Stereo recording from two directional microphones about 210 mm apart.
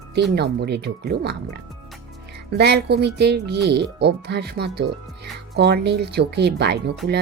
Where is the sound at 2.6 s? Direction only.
50° right (ahead or behind).